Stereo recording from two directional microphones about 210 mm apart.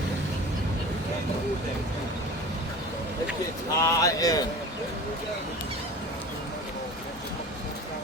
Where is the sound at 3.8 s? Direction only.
15° left (ahead or behind).